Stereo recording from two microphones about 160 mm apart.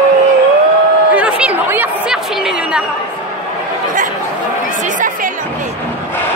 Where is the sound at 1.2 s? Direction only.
5° right (ahead or behind).